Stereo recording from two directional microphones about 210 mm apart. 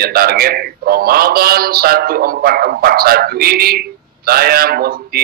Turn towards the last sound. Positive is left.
turn(degrees=-45)  # may be behind; listen again after turning